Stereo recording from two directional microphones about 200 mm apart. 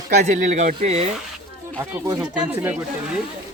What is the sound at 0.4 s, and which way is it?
Speech, 35° right (ahead or behind).